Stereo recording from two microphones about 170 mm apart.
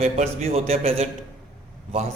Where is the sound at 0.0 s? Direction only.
40° right (ahead or behind).